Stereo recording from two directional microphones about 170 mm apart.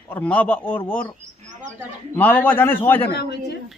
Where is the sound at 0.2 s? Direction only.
10° left (ahead or behind).